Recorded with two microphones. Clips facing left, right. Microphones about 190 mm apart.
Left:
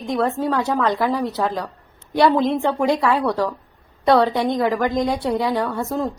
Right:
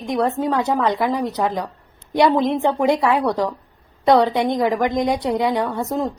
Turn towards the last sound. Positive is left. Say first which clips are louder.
# right 1 dB
turn(degrees=-15)  # may be behind; listen again after turning